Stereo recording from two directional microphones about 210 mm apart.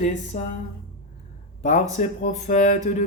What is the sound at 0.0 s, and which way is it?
Speech, 35° left (ahead or behind).